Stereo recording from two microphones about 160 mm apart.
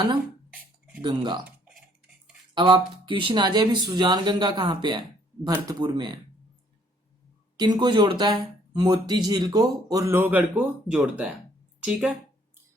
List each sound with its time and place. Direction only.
1.0 s speech: 30° right (ahead or behind)
2.6 s speech: 30° right (ahead or behind)
7.5 s speech: 25° right (ahead or behind); by 12.1 s 5° right (ahead or behind)